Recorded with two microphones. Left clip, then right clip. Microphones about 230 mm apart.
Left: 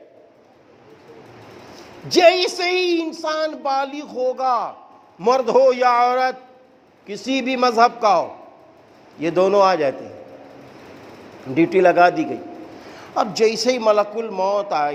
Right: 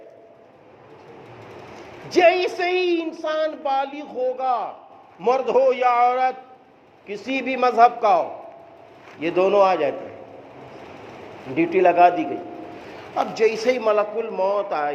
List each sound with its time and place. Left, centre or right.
2.0 s speech: left
11.5 s a man's voice: left